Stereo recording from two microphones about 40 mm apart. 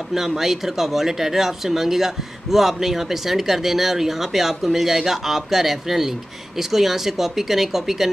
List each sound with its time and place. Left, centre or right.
0.1 s speech: centre